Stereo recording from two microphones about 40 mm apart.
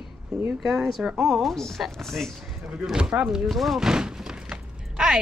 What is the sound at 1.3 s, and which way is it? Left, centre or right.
A woman's voice, centre.